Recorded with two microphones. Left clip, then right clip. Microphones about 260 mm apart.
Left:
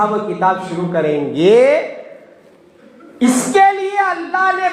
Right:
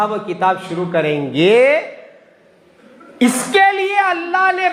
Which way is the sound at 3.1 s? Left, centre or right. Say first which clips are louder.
Left 1 dB; right.